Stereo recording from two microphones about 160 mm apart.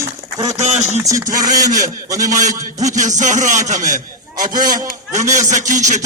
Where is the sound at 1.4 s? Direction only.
20° right (ahead or behind).